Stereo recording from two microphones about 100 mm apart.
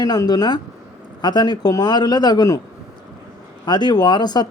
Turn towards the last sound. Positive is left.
turn(degrees=45)  # may be behind; listen again after turning